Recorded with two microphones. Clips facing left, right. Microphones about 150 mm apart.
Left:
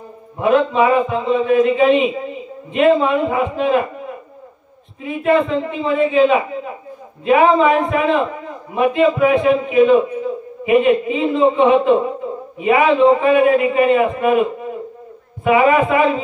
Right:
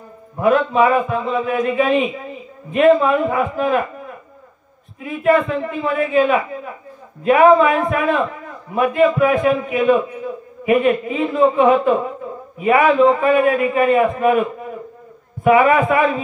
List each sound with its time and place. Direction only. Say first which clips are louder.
0.4 s a man's voice: even; 20° left (ahead or behind)
5.0 s a man's voice: even; 25° left (ahead or behind)
15.5 s a man's voice: left 1 dB; 20° left (ahead or behind)